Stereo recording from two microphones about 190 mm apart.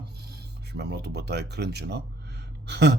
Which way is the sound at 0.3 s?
60° right (ahead or behind).